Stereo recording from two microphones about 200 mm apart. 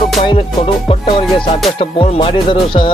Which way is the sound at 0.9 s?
25° left (ahead or behind).